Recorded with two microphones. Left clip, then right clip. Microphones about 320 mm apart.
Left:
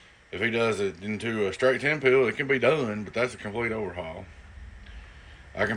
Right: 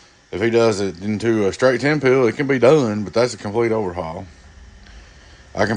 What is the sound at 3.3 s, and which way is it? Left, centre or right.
Speech, right.